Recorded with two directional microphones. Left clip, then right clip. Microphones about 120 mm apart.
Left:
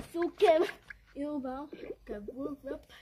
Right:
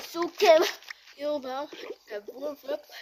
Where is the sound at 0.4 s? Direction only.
85° right.